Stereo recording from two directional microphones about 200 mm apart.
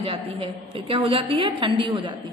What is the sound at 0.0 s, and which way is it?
A woman's voice, 25° right (ahead or behind).